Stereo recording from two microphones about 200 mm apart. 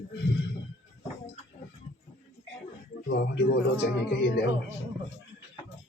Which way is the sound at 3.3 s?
60° left (ahead or behind).